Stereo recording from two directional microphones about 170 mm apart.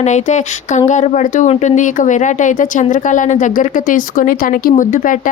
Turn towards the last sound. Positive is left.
turn(degrees=50)  # may be behind; listen again after turning